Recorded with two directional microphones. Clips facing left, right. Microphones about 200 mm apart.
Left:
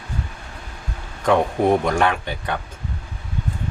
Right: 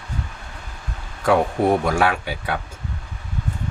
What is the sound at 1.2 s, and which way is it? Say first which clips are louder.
Speech: even; 5° right (ahead or behind).